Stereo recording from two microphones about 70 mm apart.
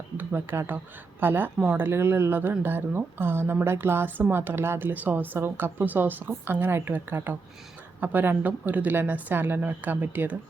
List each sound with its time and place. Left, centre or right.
0.2 s a woman's voice: right